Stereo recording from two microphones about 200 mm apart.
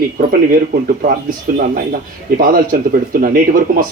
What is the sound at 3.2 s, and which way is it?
Speech, 45° right (ahead or behind).